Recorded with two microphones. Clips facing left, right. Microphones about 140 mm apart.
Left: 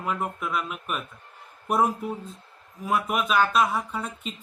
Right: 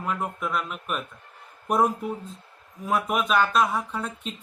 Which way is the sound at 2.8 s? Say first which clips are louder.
Right 1 dB; centre (ahead or behind).